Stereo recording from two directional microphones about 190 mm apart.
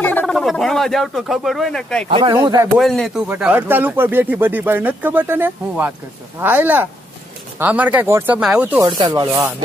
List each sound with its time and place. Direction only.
0.0 s speech: 10° left (ahead or behind)
2.0 s rub: 25° right (ahead or behind)
2.3 s speech: 15° right (ahead or behind)
2.8 s speech: centre (ahead or behind)
8.8 s rub: 20° right (ahead or behind)